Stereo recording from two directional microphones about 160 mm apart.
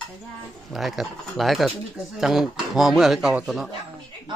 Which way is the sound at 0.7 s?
Centre (ahead or behind).